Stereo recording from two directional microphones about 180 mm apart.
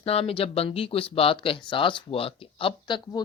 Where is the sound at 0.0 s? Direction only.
35° left (ahead or behind).